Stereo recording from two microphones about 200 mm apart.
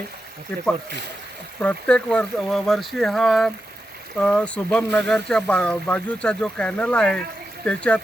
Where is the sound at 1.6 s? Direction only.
5° left (ahead or behind).